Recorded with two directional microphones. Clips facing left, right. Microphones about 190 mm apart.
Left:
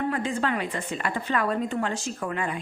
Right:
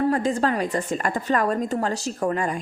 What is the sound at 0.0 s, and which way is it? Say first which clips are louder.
A woman's voice: right 5 dB; 40° right (ahead or behind).